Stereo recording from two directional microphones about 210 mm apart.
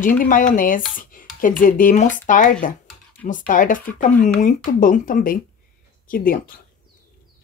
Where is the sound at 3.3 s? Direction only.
40° left (ahead or behind).